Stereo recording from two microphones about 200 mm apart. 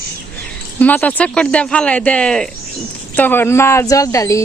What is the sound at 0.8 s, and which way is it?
Speech, 10° left (ahead or behind).